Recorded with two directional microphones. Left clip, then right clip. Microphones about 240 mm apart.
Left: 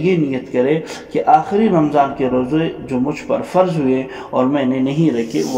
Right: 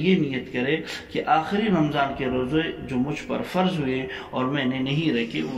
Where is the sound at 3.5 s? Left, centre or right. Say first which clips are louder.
Left 10 dB; left.